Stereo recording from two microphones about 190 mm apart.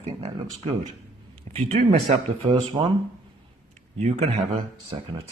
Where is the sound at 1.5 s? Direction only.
30° right (ahead or behind).